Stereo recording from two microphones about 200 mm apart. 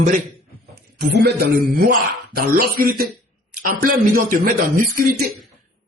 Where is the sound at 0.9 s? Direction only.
50° right (ahead or behind).